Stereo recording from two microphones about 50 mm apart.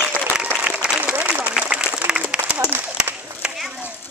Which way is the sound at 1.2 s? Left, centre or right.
Right.